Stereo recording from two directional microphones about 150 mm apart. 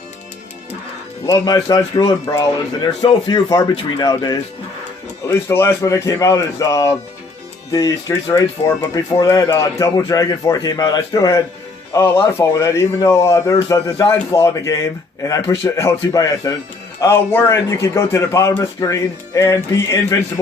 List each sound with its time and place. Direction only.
1.3 s speech: 25° left (ahead or behind)
5.3 s speech: 15° left (ahead or behind)